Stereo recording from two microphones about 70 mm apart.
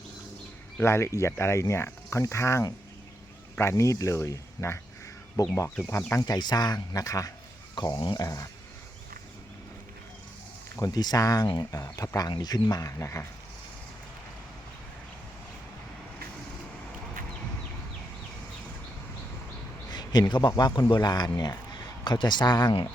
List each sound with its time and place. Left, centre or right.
0.8 s speech: left
5.4 s speech: left
6.2 s speech: left
7.9 s speech: left
10.8 s speech: left
11.8 s speech: left
19.9 s a sound: left
20.6 s a man's voice: left